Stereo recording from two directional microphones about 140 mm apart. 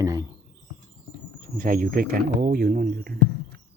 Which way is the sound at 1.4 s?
90° right.